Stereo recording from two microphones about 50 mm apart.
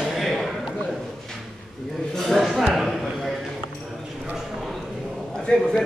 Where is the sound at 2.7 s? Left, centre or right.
Centre.